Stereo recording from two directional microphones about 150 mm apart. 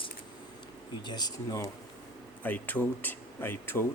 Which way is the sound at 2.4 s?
10° left (ahead or behind).